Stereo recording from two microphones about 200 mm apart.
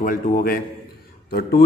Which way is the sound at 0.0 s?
45° left (ahead or behind).